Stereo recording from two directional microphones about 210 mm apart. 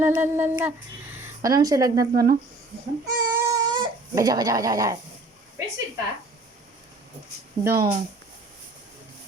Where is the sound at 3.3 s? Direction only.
20° right (ahead or behind).